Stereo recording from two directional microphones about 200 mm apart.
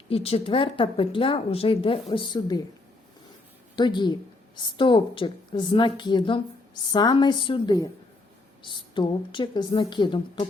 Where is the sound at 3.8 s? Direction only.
20° left (ahead or behind).